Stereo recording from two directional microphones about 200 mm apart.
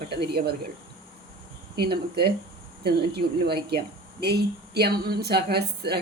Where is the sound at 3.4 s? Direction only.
55° right (ahead or behind).